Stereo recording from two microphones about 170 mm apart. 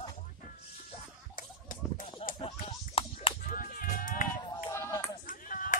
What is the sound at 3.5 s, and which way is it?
Music, 55° left (ahead or behind).